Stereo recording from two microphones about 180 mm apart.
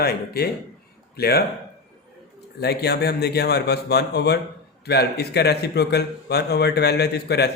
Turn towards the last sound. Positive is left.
turn(degrees=65)  # may be behind; listen again after turning